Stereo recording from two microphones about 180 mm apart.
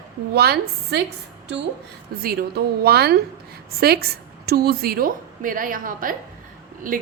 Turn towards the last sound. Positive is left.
turn(degrees=-50)  # may be behind; listen again after turning